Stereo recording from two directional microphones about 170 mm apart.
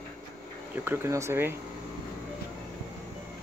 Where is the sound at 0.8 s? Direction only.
15° right (ahead or behind).